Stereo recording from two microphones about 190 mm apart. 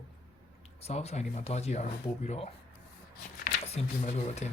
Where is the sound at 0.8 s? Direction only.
35° left (ahead or behind).